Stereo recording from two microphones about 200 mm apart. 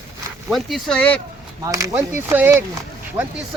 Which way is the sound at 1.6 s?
15° right (ahead or behind).